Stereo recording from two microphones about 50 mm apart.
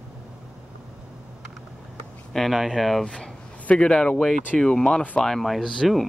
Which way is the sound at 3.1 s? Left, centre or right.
Left.